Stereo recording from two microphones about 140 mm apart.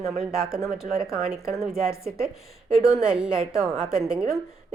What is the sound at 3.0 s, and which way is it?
A woman's voice, 5° right (ahead or behind).